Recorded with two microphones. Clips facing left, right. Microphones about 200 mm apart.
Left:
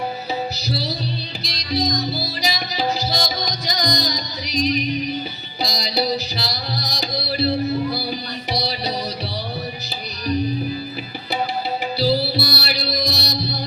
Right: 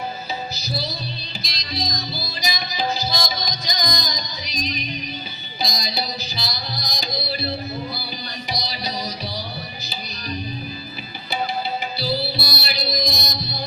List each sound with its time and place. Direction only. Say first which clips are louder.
0.5 s music: left 3 dB; 70° left (ahead or behind)
8.5 s music: left 7 dB; 65° left (ahead or behind)
11.9 s music: left 8 dB; 70° left (ahead or behind)